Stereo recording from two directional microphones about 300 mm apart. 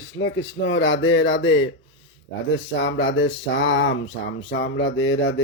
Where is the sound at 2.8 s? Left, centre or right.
Left.